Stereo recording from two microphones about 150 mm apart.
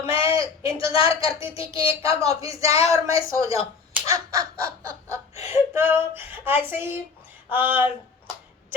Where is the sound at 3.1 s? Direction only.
20° right (ahead or behind).